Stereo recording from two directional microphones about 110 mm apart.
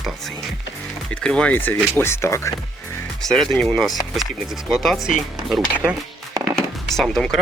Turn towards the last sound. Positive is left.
turn(degrees=5)  # may be behind; listen again after turning